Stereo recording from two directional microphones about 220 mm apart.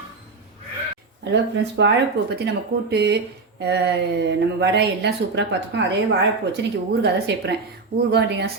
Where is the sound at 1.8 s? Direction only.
50° right (ahead or behind).